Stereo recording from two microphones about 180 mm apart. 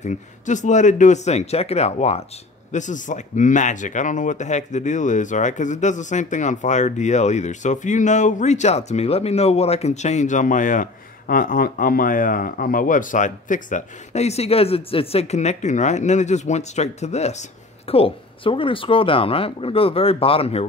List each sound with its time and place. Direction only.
0.0 s speech: 40° left (ahead or behind)